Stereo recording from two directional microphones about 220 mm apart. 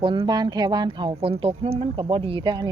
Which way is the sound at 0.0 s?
25° right (ahead or behind).